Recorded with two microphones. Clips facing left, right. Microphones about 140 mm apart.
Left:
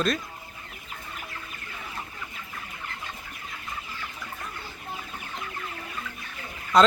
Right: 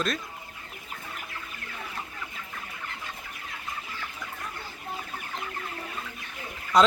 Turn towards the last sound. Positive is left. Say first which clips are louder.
# left 2 dB
turn(degrees=-10)  # may be behind; listen again after turning